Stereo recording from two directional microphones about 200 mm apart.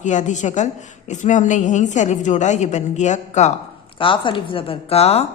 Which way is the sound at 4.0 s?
25° left (ahead or behind).